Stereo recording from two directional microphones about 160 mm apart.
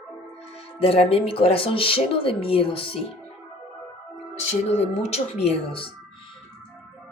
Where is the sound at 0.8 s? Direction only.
35° left (ahead or behind).